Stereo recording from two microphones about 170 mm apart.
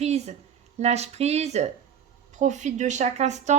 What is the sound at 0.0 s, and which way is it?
Speech, 40° right (ahead or behind).